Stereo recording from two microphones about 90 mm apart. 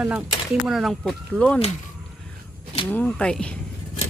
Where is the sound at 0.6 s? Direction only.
5° right (ahead or behind).